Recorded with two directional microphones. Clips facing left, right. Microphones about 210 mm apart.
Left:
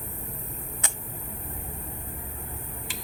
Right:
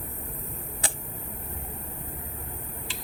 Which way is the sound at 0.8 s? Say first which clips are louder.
Right 4 dB; 30° right (ahead or behind).